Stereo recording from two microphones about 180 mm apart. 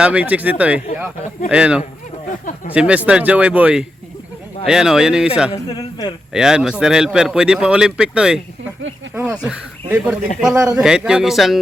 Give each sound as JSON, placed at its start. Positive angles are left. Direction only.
{"t": 0.0, "sound": "speech", "side_deg": -5}
{"t": 5.7, "sound": "speech", "side_deg": 25}
{"t": 6.3, "sound": "speech", "side_deg": -5}
{"t": 9.1, "sound": "speech", "side_deg": -20}
{"t": 9.4, "sound": "speech", "side_deg": -5}